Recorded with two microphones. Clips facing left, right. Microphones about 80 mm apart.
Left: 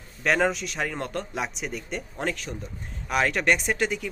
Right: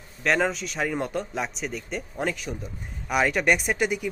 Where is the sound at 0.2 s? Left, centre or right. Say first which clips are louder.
Even; centre.